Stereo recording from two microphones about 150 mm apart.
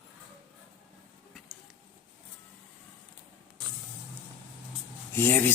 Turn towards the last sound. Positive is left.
turn(degrees=15)  # may be behind; listen again after turning